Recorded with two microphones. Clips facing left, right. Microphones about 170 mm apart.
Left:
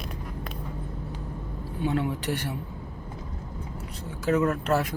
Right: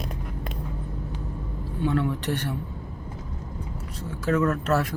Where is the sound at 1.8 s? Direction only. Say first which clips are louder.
Right 2 dB; 15° left (ahead or behind).